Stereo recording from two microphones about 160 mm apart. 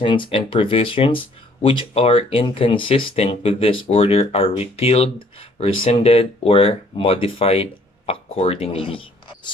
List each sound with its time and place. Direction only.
0.0 s speech: 30° left (ahead or behind)